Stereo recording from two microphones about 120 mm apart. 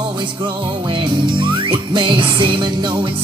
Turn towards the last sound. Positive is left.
turn(degrees=-40)  # may be behind; listen again after turning